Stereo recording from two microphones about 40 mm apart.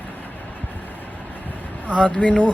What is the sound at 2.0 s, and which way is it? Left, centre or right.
Speech, left.